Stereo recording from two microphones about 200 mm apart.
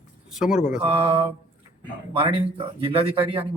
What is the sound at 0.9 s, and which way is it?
Speech, 30° right (ahead or behind).